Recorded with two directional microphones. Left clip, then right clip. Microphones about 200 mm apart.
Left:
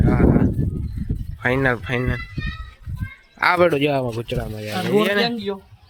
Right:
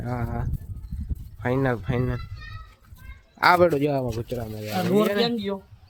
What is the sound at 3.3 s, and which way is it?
Speech, 10° right (ahead or behind).